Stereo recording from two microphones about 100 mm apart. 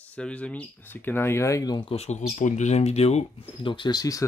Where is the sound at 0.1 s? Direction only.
15° left (ahead or behind); by 1.8 s 35° left (ahead or behind).